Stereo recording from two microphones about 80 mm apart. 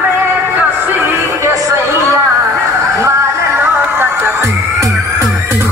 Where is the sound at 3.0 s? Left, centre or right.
Right.